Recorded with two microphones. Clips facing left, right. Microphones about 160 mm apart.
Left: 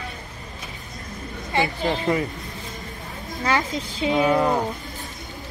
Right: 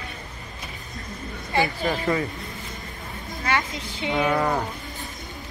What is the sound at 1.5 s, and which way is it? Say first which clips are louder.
Speech: left 1 dB; 20° left (ahead or behind).